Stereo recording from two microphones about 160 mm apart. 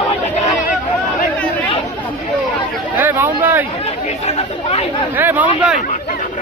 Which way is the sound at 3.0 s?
10° right (ahead or behind).